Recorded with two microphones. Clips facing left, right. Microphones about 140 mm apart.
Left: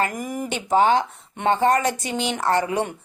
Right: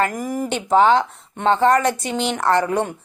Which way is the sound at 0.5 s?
55° right (ahead or behind).